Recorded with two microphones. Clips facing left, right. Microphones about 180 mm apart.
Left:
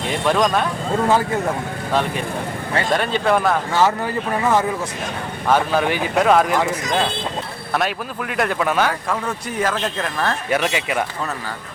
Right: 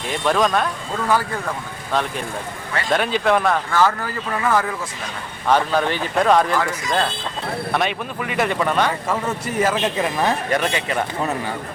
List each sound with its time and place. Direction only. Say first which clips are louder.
0.1 s speech: even; centre (ahead or behind)
0.9 s speech: left 3 dB; 25° left (ahead or behind)
2.9 s speech: right 1 dB; centre (ahead or behind)
3.7 s speech: left 1 dB; 20° left (ahead or behind)
5.5 s speech: even; 5° left (ahead or behind)
7.7 s speech: left 2 dB; centre (ahead or behind)
9.0 s speech: right 1 dB; 5° right (ahead or behind)
10.5 s speech: left 1 dB; 10° left (ahead or behind)